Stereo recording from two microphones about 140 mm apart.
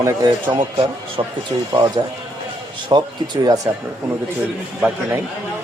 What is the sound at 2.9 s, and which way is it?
Speech, 35° right (ahead or behind).